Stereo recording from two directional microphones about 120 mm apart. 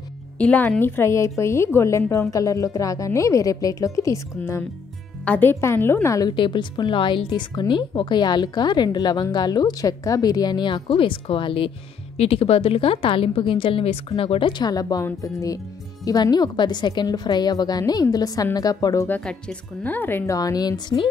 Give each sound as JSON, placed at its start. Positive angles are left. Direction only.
{"t": 0.4, "sound": "a woman's voice", "side_deg": 10}
{"t": 5.2, "sound": "a woman's voice", "side_deg": 15}
{"t": 6.3, "sound": "a woman's voice", "side_deg": 40}
{"t": 14.6, "sound": "a woman's voice", "side_deg": 35}
{"t": 19.0, "sound": "speech", "side_deg": 10}
{"t": 20.3, "sound": "a woman's voice", "side_deg": 30}